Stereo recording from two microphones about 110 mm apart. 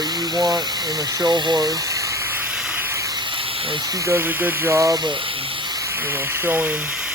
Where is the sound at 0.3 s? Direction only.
35° right (ahead or behind).